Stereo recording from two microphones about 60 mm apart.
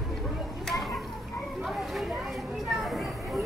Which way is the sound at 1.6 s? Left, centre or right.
Centre.